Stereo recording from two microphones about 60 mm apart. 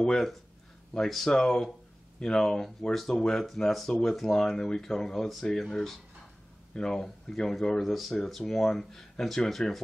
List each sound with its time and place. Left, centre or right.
0.0 s speech: centre